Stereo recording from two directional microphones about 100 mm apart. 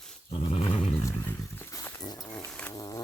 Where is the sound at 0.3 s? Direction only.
85° left; by 0.8 s 60° left (ahead or behind).